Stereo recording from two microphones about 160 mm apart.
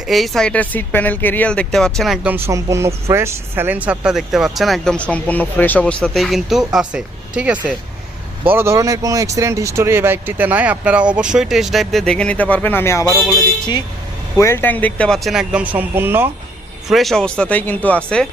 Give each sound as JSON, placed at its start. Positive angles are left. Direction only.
{"t": 0.1, "sound": "speech", "side_deg": 0}
{"t": 2.2, "sound": "speech", "side_deg": -15}
{"t": 14.3, "sound": "speech", "side_deg": 15}
{"t": 16.9, "sound": "speech", "side_deg": 0}